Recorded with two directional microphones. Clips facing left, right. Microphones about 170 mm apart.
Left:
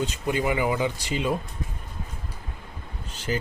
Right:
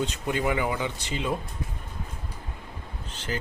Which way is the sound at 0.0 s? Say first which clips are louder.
Left 1 dB; 10° left (ahead or behind).